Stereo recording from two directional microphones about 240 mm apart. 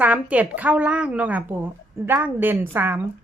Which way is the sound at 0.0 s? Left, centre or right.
Centre.